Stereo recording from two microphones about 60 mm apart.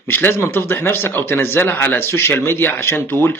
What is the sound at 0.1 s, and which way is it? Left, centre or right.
A man's voice, left.